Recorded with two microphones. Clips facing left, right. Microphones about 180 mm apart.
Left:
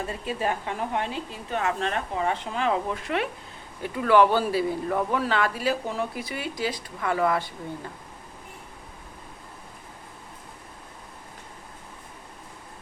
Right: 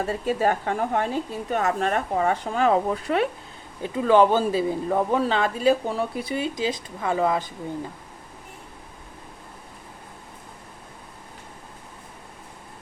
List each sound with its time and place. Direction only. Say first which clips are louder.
0.0 s a woman's voice: right 6 dB; 40° right (ahead or behind)
3.9 s speech: right 2 dB; 20° right (ahead or behind)